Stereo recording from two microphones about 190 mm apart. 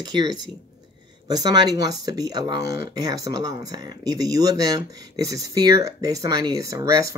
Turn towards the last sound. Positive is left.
turn(degrees=-15)  # may be behind; listen again after turning